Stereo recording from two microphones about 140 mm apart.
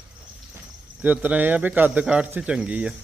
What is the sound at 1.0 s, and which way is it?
Speech, 10° right (ahead or behind).